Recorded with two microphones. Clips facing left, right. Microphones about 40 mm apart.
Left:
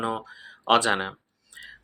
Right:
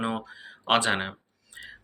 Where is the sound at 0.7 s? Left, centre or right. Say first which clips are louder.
Left 3 dB; centre.